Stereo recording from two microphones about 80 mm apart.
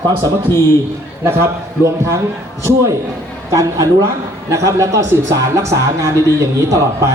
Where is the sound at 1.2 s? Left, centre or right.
Right.